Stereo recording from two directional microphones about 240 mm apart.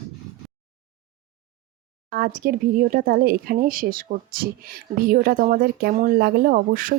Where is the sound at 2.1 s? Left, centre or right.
Right.